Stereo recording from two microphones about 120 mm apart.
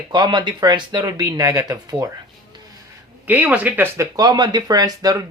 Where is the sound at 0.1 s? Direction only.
35° right (ahead or behind).